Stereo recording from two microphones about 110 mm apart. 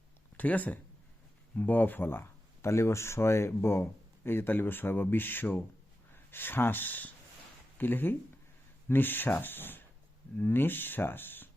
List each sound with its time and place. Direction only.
0.3 s speech: 15° left (ahead or behind)